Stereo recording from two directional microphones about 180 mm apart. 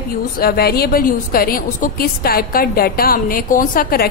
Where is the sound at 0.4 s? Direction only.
60° left (ahead or behind).